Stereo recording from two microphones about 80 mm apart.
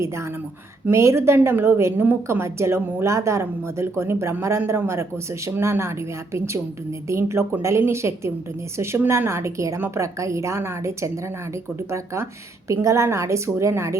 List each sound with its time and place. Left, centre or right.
0.0 s a woman's voice: right